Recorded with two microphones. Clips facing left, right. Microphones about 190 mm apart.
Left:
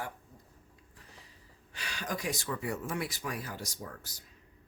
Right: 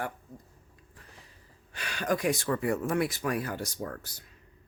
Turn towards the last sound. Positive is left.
turn(degrees=-60)  # may be behind; listen again after turning